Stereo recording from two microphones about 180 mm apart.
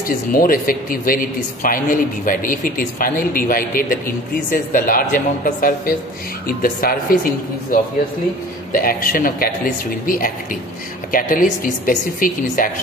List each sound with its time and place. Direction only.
0.3 s a man's voice: 50° left (ahead or behind)